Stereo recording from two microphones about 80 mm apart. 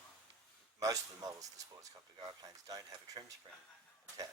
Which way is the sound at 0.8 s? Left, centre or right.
Right.